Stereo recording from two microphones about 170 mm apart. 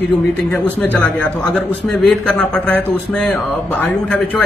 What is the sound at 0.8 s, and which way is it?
A man's voice, 10° left (ahead or behind).